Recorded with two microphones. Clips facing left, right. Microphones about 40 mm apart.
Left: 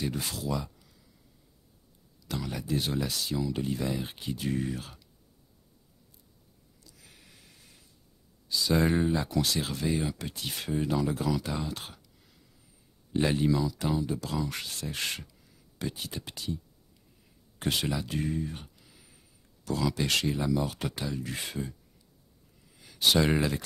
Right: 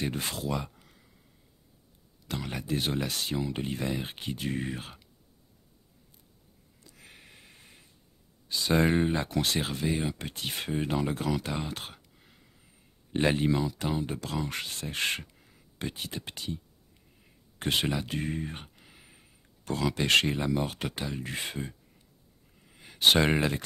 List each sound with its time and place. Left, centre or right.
0.0 s speech: right
2.2 s speech: right
6.8 s a sound: right
8.5 s speech: right
14.5 s speech: right